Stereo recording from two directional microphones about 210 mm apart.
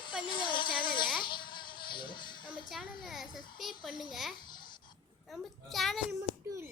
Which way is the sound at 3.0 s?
Centre (ahead or behind).